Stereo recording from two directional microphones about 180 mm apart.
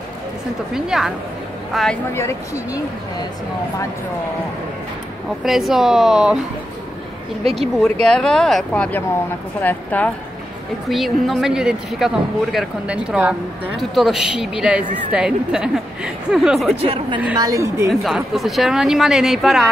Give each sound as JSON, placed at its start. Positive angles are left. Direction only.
{"t": 0.7, "sound": "a woman's voice", "side_deg": -5}
{"t": 5.4, "sound": "a woman's voice", "side_deg": 0}
{"t": 7.8, "sound": "a woman's voice", "side_deg": 5}
{"t": 16.8, "sound": "a woman's voice", "side_deg": -30}
{"t": 17.4, "sound": "a woman's voice", "side_deg": -15}
{"t": 17.8, "sound": "a woman's voice", "side_deg": 0}